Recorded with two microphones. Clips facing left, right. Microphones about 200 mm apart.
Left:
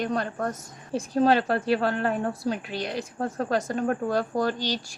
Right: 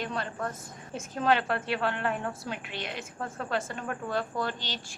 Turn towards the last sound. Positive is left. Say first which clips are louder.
# left 8 dB
turn(degrees=40)  # may be behind; listen again after turning